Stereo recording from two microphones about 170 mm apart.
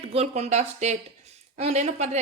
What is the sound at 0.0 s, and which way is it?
A woman's voice, 35° right (ahead or behind).